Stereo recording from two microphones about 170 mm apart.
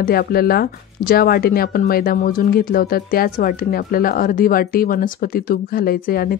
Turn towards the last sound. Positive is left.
turn(degrees=60)  # may be behind; listen again after turning